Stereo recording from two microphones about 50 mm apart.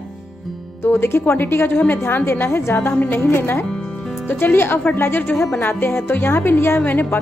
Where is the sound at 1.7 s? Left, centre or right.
Left.